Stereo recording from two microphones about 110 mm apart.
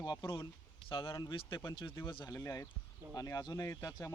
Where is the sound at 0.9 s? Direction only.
50° left (ahead or behind).